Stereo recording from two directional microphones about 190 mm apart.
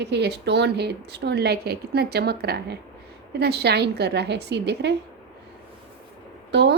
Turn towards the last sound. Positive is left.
turn(degrees=-60)  # may be behind; listen again after turning